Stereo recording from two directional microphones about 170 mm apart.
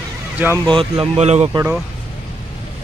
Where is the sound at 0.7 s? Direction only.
35° right (ahead or behind).